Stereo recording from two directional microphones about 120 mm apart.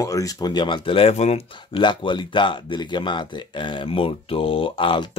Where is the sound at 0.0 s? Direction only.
30° left (ahead or behind); by 1.8 s 65° left (ahead or behind).